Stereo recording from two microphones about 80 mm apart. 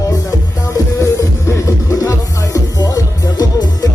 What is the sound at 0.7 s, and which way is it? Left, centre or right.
Music, left.